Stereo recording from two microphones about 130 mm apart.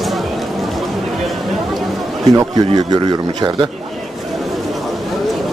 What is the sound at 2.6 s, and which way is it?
Speech, 35° right (ahead or behind).